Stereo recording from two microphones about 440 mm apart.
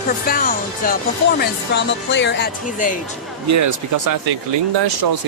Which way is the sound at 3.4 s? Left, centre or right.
Right.